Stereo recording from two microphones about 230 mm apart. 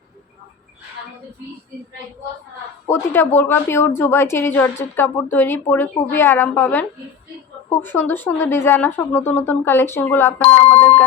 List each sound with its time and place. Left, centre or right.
2.8 s a woman's voice: centre
10.5 s speech: left
10.8 s a woman's voice: centre